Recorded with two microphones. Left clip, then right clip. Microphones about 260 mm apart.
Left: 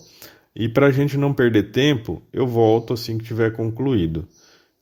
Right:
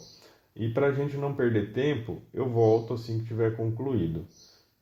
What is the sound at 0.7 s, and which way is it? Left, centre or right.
Speech, left.